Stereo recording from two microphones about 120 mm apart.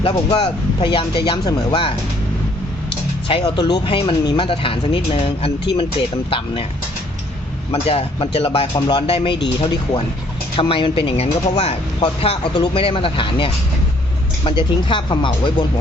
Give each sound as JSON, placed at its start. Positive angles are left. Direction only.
{"t": 0.0, "sound": "speech", "side_deg": 45}
{"t": 3.4, "sound": "speech", "side_deg": 35}
{"t": 7.7, "sound": "speech", "side_deg": 55}
{"t": 8.7, "sound": "speech", "side_deg": 35}
{"t": 9.0, "sound": "speech", "side_deg": 50}